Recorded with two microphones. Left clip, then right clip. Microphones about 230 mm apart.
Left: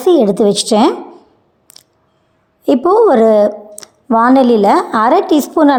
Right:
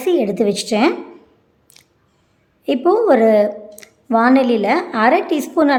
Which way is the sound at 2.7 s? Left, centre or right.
Centre.